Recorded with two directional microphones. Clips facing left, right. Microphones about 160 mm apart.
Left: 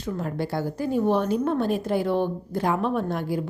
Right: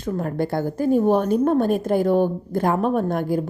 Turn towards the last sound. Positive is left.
turn(degrees=-50)  # may be behind; listen again after turning